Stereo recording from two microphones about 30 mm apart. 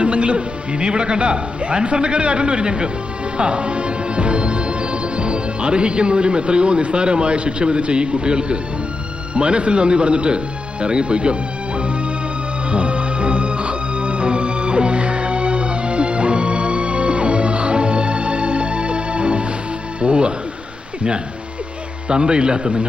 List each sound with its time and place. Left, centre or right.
0.0 s a man's voice: right
12.7 s music: right
22.1 s a man's voice: right